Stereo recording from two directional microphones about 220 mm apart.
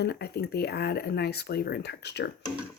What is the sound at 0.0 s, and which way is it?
Speech, 45° left (ahead or behind).